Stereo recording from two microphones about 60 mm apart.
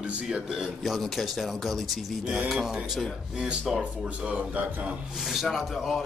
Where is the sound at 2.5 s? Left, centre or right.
Centre.